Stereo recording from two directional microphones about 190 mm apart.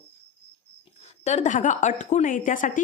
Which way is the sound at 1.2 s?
40° left (ahead or behind).